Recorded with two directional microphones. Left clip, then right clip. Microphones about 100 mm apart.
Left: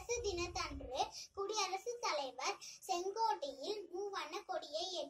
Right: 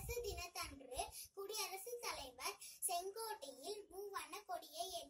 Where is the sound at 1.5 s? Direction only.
40° right (ahead or behind).